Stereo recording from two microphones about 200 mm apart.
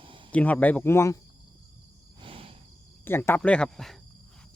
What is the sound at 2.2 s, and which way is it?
Cricket, 25° right (ahead or behind).